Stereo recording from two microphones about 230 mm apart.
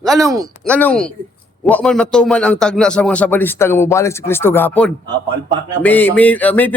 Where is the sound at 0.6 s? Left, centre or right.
Centre.